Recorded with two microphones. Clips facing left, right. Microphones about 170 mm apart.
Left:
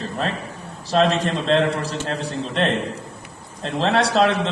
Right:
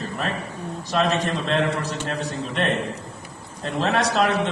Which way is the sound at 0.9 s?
30° left (ahead or behind).